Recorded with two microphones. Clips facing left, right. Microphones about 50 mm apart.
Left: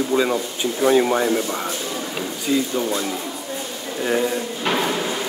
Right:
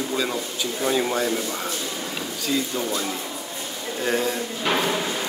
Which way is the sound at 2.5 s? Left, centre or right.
Centre.